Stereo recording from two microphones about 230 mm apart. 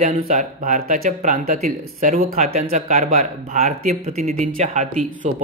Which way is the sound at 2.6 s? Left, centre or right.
Right.